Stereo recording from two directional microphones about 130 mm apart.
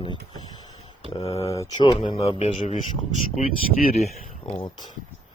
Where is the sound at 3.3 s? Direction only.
80° left.